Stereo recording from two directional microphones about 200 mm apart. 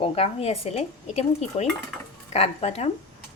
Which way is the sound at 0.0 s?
30° left (ahead or behind).